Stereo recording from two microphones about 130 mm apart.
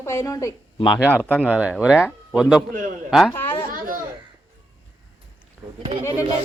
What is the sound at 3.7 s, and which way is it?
Speech, 90° right.